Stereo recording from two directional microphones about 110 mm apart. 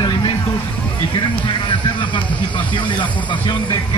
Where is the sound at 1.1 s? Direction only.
45° left (ahead or behind).